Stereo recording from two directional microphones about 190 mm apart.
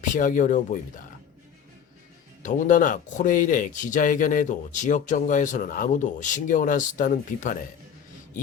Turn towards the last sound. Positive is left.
turn(degrees=45)  # may be behind; listen again after turning